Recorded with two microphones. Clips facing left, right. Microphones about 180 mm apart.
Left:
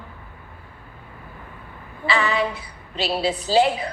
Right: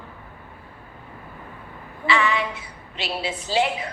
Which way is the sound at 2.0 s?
35° left (ahead or behind).